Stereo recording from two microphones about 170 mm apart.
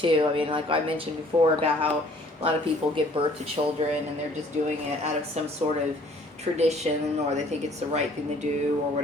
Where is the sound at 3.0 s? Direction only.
30° right (ahead or behind).